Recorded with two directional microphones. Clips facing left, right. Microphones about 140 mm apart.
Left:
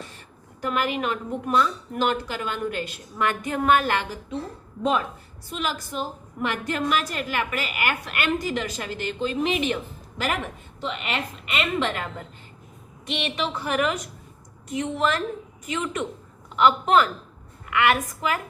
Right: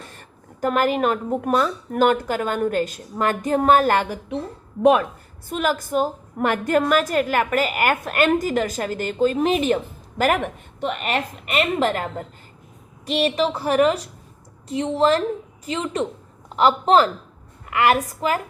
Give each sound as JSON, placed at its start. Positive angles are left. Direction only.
{"t": 0.1, "sound": "a sound", "side_deg": -45}
{"t": 1.5, "sound": "a woman's voice", "side_deg": -45}
{"t": 4.8, "sound": "a woman's voice", "side_deg": -65}
{"t": 5.5, "sound": "a woman's voice", "side_deg": -50}